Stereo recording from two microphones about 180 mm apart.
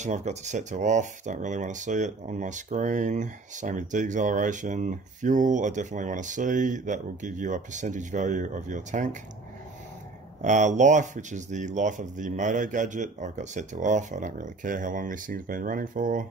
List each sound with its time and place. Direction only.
0.0 s speech: 40° right (ahead or behind)
10.4 s speech: 40° right (ahead or behind)